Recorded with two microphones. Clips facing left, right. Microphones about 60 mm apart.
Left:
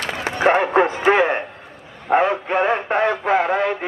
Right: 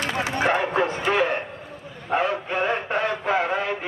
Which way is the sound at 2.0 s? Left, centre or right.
Left.